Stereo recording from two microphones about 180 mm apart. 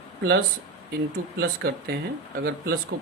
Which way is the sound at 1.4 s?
65° right (ahead or behind).